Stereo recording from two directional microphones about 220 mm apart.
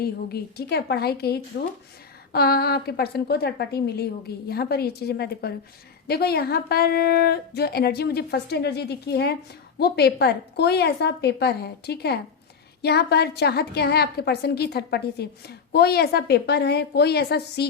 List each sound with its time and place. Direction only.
0.0 s a woman's voice: 45° left (ahead or behind)